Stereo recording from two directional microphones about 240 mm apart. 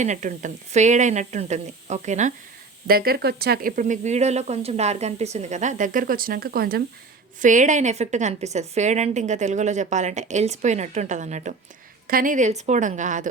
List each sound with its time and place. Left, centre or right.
0.0 s a woman's voice: right